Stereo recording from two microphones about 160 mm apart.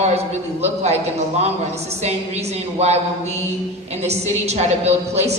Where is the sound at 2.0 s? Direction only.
45° right (ahead or behind).